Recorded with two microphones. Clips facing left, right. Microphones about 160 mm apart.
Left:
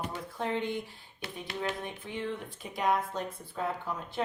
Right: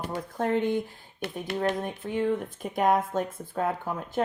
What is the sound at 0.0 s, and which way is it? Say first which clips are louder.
Speech: right 5 dB; 45° right (ahead or behind).